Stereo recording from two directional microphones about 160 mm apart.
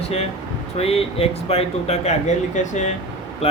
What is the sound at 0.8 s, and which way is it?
Speech, 40° left (ahead or behind).